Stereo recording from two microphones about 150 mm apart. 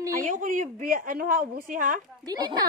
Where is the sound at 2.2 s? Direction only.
30° right (ahead or behind).